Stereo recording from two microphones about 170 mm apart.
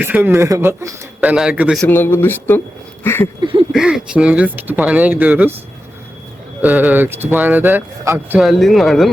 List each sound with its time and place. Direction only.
0.0 s speech: 10° right (ahead or behind)
1.8 s speech: 15° left (ahead or behind)
3.0 s a sound: 10° left (ahead or behind)
3.4 s a sound: 30° right (ahead or behind)
3.7 s speech: 5° right (ahead or behind)
6.6 s speech: 10° right (ahead or behind)
8.4 s speech: centre (ahead or behind)